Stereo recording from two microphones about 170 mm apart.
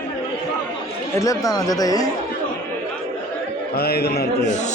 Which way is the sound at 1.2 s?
20° left (ahead or behind).